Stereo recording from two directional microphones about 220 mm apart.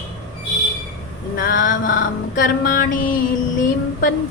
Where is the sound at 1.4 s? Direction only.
40° left (ahead or behind).